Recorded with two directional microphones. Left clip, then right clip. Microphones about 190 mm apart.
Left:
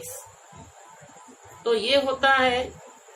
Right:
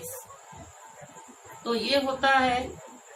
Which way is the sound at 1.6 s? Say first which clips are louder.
Left 4 dB; 35° left (ahead or behind).